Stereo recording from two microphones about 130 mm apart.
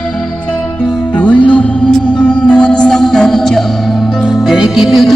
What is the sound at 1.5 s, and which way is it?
Music, 10° left (ahead or behind).